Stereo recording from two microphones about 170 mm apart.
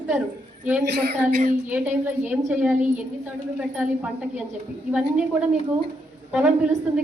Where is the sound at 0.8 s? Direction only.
70° right (ahead or behind).